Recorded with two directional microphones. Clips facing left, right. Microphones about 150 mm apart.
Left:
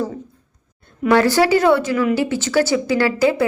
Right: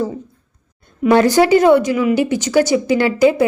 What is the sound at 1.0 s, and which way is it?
Speech, 20° right (ahead or behind).